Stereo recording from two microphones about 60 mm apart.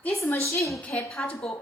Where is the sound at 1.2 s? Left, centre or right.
Centre.